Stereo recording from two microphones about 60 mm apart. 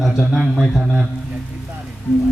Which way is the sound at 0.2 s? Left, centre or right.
Centre.